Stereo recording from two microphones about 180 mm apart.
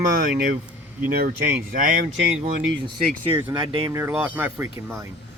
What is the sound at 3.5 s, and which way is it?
Speech, 20° right (ahead or behind).